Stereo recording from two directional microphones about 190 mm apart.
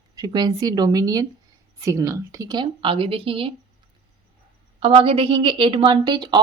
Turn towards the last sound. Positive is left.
turn(degrees=-25)  # may be behind; listen again after turning